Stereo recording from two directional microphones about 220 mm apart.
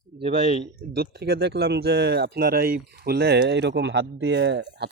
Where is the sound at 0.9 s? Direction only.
45° right (ahead or behind).